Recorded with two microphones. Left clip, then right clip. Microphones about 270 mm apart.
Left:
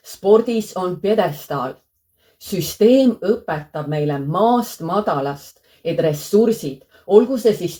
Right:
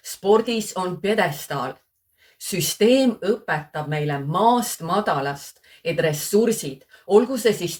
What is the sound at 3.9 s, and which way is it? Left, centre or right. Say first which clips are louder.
Speech: left 4 dB; right.